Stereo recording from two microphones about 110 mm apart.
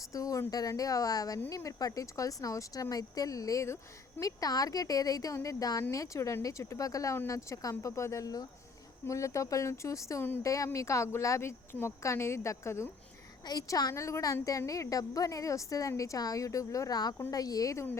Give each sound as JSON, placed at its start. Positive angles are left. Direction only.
{"t": 0.1, "sound": "a woman's voice", "side_deg": 30}
{"t": 13.4, "sound": "a woman's voice", "side_deg": 35}